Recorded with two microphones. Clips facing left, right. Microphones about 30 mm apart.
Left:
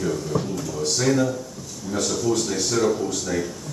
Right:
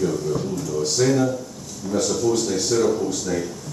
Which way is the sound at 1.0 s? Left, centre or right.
Centre.